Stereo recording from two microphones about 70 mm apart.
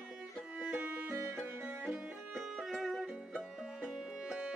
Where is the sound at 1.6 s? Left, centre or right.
Right.